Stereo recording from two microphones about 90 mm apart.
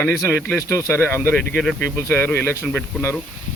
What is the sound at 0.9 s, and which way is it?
Speech, 25° left (ahead or behind).